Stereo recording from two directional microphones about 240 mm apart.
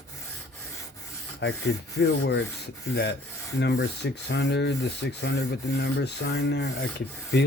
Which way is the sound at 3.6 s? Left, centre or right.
Left.